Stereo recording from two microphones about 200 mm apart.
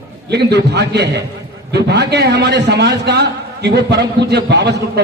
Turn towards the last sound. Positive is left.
turn(degrees=-60)  # may be behind; listen again after turning